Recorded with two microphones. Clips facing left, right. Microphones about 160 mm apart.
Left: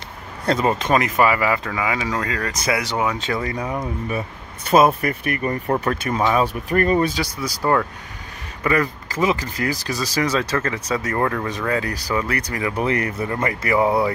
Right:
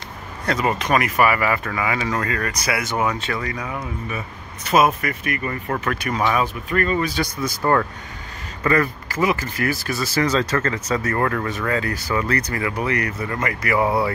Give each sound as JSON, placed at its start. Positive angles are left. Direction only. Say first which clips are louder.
{"t": 0.5, "sound": "speech", "louder": "left 2 dB", "side_deg": 30}
{"t": 7.6, "sound": "speech", "louder": "even", "side_deg": 10}
{"t": 12.7, "sound": "speech", "louder": "left 5 dB", "side_deg": 25}